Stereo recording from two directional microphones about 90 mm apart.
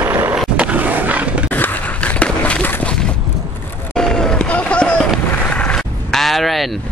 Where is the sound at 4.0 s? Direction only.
5° left (ahead or behind).